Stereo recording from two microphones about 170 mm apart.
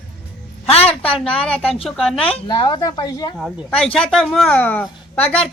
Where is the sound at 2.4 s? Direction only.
25° left (ahead or behind).